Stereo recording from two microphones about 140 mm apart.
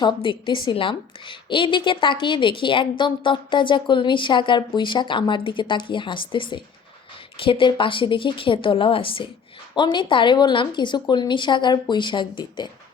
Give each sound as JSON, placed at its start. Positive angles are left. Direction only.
{"t": 0.0, "sound": "a woman's voice", "side_deg": 35}